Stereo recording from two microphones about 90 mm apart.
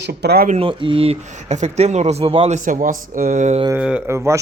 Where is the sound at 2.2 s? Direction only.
90° right.